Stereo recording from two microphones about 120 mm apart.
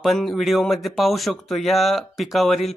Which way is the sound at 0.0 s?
Centre (ahead or behind).